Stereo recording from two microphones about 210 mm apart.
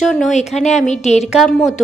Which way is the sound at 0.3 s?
35° left (ahead or behind).